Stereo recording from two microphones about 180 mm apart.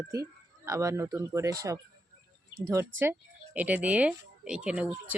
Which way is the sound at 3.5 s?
10° right (ahead or behind).